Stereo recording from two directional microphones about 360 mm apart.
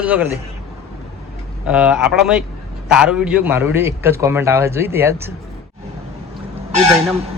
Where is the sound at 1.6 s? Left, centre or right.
Centre.